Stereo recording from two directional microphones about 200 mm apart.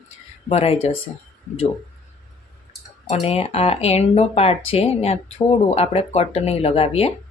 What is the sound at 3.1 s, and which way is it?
Speech, 30° left (ahead or behind).